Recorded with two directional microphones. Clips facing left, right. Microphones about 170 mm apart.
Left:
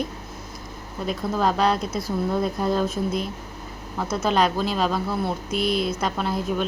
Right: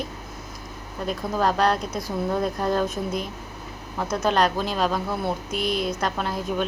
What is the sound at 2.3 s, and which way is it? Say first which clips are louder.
Speech: even; 5° left (ahead or behind).